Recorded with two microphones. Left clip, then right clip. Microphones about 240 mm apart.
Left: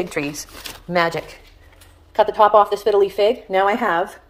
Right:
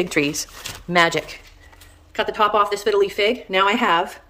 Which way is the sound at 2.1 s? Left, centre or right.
Centre.